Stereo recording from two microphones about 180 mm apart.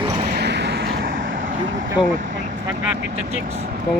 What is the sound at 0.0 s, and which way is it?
Vehicle, 30° right (ahead or behind).